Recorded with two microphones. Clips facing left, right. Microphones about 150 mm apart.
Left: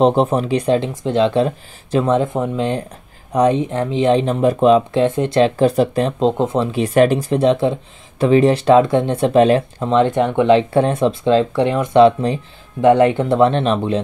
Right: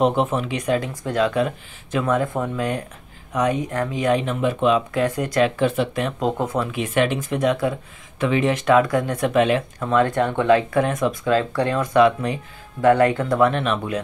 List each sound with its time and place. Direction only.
0.0 s speech: 35° left (ahead or behind)